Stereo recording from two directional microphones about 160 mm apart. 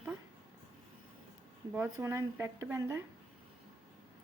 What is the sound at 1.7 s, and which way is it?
A woman's voice, 15° right (ahead or behind).